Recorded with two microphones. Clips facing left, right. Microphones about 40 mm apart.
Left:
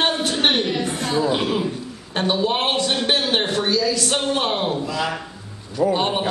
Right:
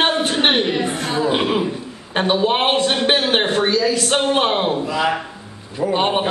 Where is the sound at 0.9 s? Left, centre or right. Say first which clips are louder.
Right 2 dB; centre.